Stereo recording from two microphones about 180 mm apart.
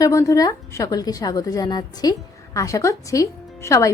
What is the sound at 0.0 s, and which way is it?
A woman's voice, 20° left (ahead or behind).